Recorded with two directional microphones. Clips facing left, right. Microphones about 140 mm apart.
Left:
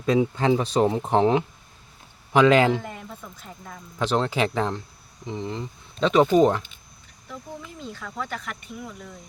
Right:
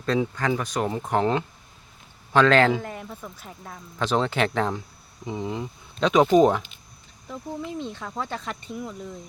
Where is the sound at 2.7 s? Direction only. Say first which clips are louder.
Even; centre (ahead or behind).